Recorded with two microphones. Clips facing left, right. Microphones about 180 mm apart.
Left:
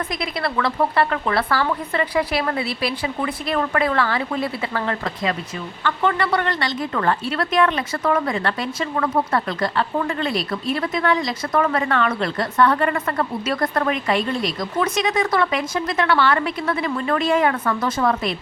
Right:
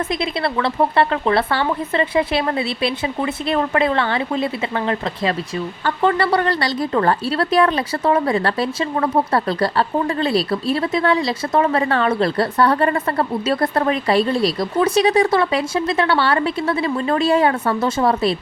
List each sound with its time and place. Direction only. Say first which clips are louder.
0.1 s a woman's voice: right 4 dB; 25° right (ahead or behind)